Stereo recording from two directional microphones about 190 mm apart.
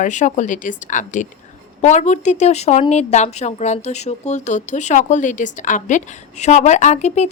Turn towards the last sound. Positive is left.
turn(degrees=35)  # may be behind; listen again after turning